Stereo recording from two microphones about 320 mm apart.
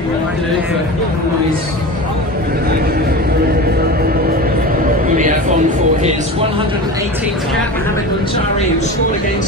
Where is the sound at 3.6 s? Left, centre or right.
Right.